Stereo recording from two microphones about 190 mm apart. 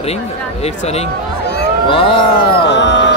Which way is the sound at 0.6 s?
35° left (ahead or behind).